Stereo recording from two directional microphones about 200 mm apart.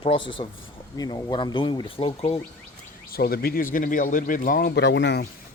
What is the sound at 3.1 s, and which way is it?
Speech, 50° left (ahead or behind).